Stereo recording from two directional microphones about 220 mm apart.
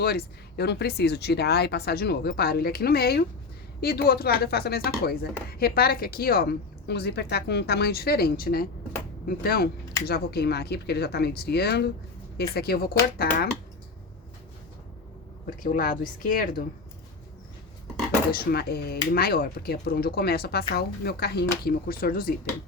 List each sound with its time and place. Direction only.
0.0 s speech: 45° left (ahead or behind)
15.4 s speech: 40° left (ahead or behind)
18.3 s speech: 45° left (ahead or behind)